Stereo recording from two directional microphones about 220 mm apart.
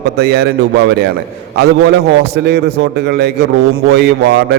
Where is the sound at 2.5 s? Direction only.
50° right (ahead or behind).